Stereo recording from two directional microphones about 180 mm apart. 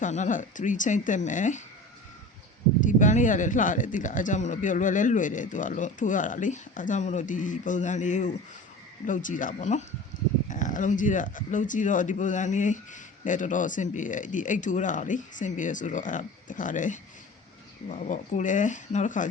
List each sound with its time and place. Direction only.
0.0 s speech: 45° left (ahead or behind)
2.8 s speech: 45° left (ahead or behind)